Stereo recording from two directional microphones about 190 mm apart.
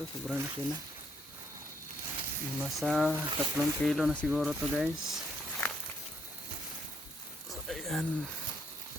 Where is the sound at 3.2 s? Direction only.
20° right (ahead or behind).